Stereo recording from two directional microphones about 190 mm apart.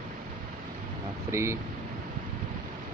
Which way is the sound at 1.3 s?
15° right (ahead or behind).